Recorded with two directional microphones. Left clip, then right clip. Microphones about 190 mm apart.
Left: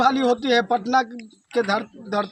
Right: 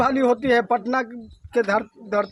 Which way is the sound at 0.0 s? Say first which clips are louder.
Even; 35° right (ahead or behind).